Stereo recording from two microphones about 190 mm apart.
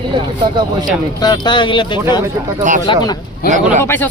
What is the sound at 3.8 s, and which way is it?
Speech, 10° left (ahead or behind).